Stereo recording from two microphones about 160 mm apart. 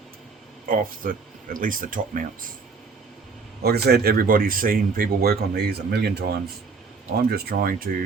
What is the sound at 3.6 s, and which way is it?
Speech, 80° right.